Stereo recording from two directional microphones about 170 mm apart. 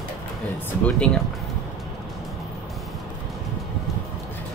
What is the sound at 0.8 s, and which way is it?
Speech, 5° left (ahead or behind).